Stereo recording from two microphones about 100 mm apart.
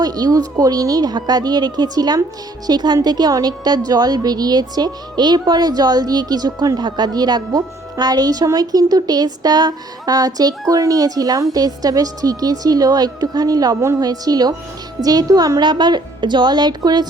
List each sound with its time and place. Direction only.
0.0 s a woman's voice: 40° right (ahead or behind)